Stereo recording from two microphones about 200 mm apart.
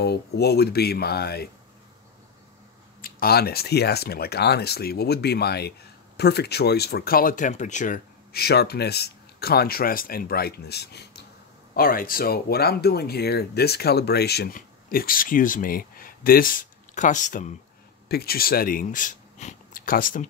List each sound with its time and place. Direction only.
0.0 s speech: 55° left (ahead or behind)
3.0 s speech: 50° left (ahead or behind)
18.0 s speech: 50° left (ahead or behind)